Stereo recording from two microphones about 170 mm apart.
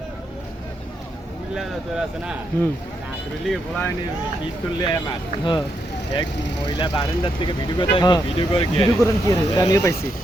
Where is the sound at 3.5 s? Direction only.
10° left (ahead or behind).